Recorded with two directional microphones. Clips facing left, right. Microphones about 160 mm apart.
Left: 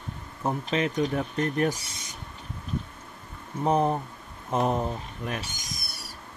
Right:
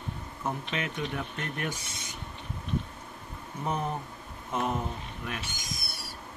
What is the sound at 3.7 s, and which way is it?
Speech, 35° left (ahead or behind).